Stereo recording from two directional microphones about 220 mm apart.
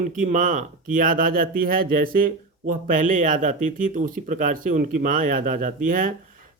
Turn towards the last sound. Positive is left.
turn(degrees=-40)  # may be behind; listen again after turning